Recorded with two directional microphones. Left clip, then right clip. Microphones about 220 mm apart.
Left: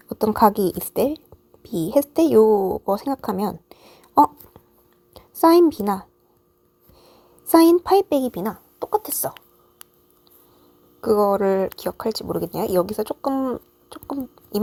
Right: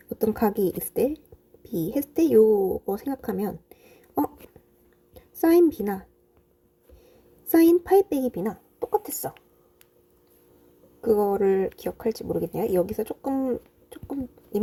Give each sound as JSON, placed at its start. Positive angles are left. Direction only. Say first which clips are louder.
{"t": 0.1, "sound": "a woman's voice", "louder": "left 8 dB", "side_deg": 5}
{"t": 2.4, "sound": "speech", "louder": "left 3 dB", "side_deg": 20}
{"t": 2.8, "sound": "a woman's voice", "louder": "left 7 dB", "side_deg": 0}
{"t": 7.0, "sound": "a sound", "louder": "left 6 dB", "side_deg": 5}
{"t": 11.0, "sound": "speech", "louder": "left 4 dB", "side_deg": 20}
{"t": 11.3, "sound": "speech", "louder": "left 2 dB", "side_deg": 45}
{"t": 11.7, "sound": "a woman's voice", "louder": "left 3 dB", "side_deg": 5}